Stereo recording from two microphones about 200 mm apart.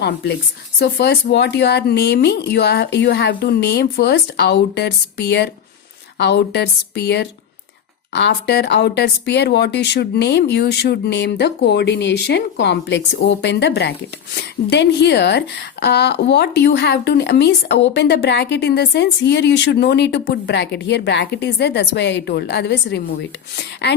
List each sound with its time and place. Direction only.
0.8 s a woman's voice: 55° left (ahead or behind)